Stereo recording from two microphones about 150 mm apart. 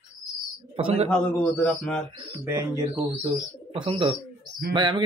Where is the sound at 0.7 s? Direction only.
35° right (ahead or behind).